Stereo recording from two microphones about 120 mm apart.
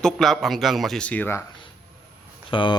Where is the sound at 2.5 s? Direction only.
45° left (ahead or behind).